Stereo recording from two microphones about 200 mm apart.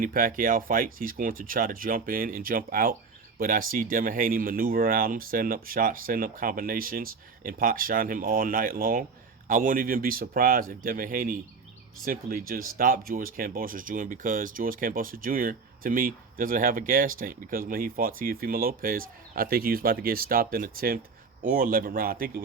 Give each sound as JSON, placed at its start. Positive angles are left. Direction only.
{"t": 0.0, "sound": "speech", "side_deg": -45}